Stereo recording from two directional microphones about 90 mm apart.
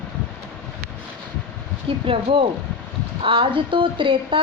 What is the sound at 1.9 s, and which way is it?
Speech, 80° right.